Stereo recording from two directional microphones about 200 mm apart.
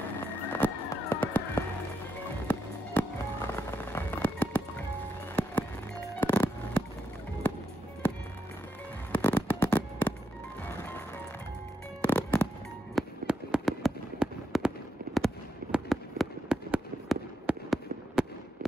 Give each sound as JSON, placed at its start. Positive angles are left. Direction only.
{"t": 0.2, "sound": "run", "side_deg": 10}
{"t": 2.4, "sound": "music", "side_deg": 10}
{"t": 9.1, "sound": "fireworks", "side_deg": 5}
{"t": 10.6, "sound": "music", "side_deg": 10}
{"t": 12.0, "sound": "music", "side_deg": 10}
{"t": 12.9, "sound": "fireworks", "side_deg": 0}